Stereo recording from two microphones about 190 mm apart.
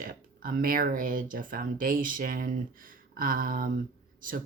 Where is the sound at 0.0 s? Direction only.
50° right (ahead or behind).